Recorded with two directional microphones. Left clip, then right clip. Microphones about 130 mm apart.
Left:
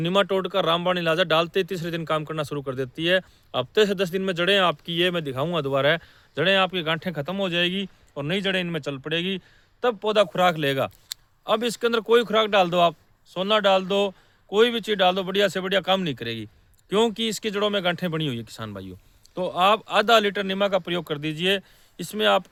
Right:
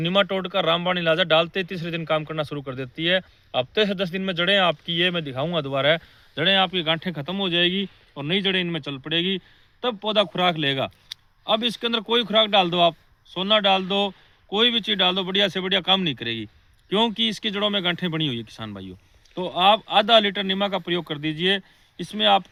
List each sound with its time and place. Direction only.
0.0 s a man's voice: 40° left (ahead or behind)